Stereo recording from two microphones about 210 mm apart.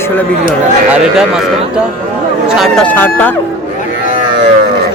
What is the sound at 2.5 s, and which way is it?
Speech, centre (ahead or behind).